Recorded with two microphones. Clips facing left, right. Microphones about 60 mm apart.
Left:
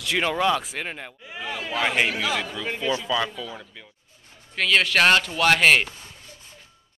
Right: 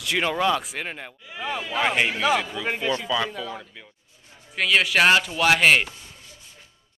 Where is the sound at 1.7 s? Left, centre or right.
Centre.